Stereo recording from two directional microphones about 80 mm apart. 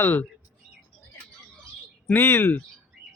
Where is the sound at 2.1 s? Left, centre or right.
Left.